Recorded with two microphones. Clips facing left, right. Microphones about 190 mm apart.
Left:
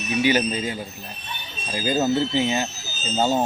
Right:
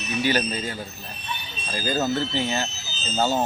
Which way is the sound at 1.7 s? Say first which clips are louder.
Left 3 dB; 20° left (ahead or behind).